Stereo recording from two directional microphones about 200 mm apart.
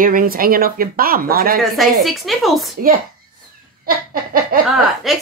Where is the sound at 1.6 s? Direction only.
Centre (ahead or behind).